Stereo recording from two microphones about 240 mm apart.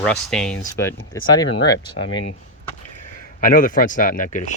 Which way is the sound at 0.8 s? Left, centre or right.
Centre.